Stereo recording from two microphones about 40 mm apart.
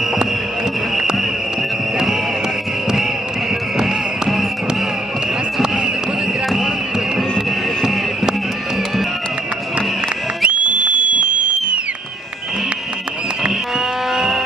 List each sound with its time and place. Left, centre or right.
3.7 s music: centre
7.3 s music: centre
10.4 s music: right
13.5 s vehicle: centre